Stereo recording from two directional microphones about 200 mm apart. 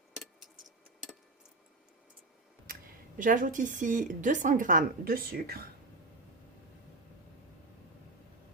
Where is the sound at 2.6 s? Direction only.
45° right (ahead or behind).